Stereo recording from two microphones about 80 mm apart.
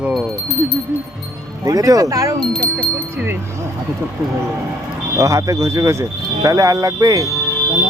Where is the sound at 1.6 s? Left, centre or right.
Right.